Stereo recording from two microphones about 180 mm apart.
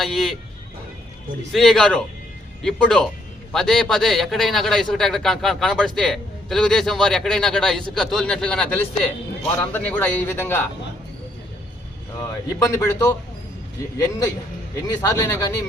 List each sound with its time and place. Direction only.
0.0 s a man's voice: centre (ahead or behind)
1.5 s a man's voice: centre (ahead or behind)
12.2 s a man's voice: 20° left (ahead or behind)
14.8 s a man's voice: 20° left (ahead or behind)